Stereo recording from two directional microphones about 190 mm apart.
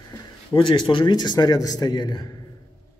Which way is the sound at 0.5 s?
25° left (ahead or behind).